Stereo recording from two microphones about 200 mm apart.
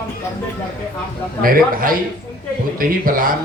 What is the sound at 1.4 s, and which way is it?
Speech, 45° right (ahead or behind).